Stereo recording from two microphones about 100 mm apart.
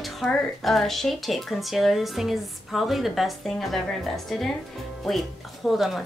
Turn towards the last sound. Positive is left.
turn(degrees=0)  # may be behind; listen again after turning